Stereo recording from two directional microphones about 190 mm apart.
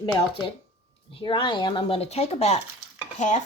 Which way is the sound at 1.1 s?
25° left (ahead or behind).